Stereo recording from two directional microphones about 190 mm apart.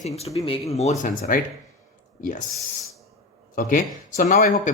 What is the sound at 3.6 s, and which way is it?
Speech, 45° left (ahead or behind).